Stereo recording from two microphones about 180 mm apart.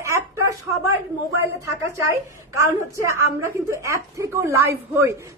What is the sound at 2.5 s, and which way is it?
A woman's voice, 15° right (ahead or behind).